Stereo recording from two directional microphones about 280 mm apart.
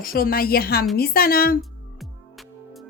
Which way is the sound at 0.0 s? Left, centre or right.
Left.